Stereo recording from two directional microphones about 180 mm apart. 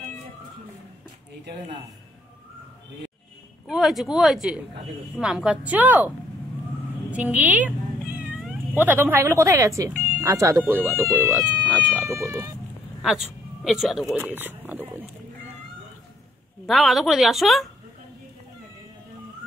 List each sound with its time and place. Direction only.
3.6 s speech: centre (ahead or behind)
13.0 s speech: centre (ahead or behind)
16.6 s speech: centre (ahead or behind)